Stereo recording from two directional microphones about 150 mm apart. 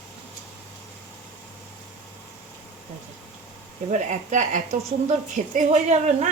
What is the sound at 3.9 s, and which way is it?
A woman's voice, 50° right (ahead or behind).